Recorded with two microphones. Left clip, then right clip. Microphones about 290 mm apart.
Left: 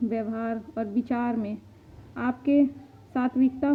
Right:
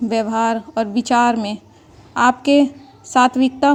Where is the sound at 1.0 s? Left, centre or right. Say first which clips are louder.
Right 14 dB; right.